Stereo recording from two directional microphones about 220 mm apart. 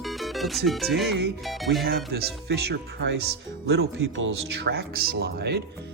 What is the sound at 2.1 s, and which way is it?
Speech, 45° right (ahead or behind).